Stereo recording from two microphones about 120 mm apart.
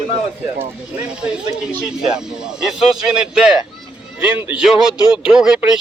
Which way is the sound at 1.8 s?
5° right (ahead or behind).